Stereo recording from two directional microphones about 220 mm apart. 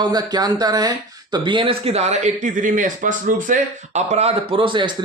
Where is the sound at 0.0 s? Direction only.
20° right (ahead or behind).